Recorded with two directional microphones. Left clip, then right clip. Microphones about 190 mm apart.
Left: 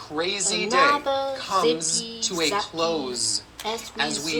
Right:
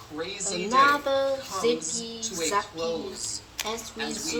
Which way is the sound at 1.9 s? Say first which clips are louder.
Left 6 dB; 55° left (ahead or behind).